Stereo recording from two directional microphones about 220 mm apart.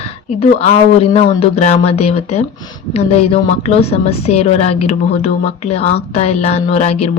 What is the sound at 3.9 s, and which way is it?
Speech, 25° left (ahead or behind).